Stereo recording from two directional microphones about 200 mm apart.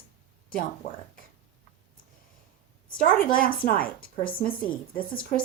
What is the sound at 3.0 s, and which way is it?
Speech, 45° left (ahead or behind).